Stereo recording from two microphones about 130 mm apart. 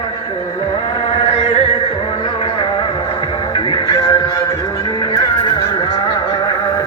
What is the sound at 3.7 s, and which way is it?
Music, 35° left (ahead or behind).